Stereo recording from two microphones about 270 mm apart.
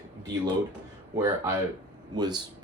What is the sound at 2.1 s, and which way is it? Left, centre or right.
Speech, centre.